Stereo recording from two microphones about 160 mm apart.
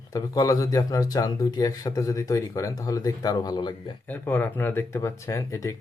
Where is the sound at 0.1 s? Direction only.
20° left (ahead or behind).